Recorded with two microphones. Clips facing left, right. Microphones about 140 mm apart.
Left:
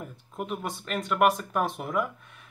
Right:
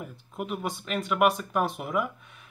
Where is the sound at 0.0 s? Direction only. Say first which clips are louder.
Even; 5° right (ahead or behind).